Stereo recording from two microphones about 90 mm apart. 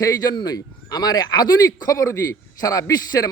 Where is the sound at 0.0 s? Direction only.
40° left (ahead or behind).